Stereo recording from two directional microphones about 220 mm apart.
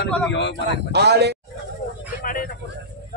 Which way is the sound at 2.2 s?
40° left (ahead or behind).